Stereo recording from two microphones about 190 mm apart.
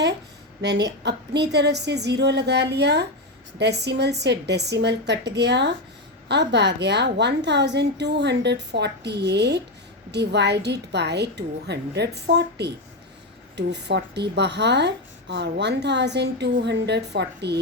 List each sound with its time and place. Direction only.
0.6 s speech: 65° right (ahead or behind)